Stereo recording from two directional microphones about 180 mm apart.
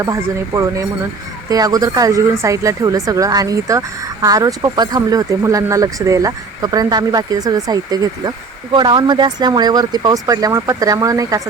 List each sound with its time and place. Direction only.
0.0 s speech: 15° right (ahead or behind)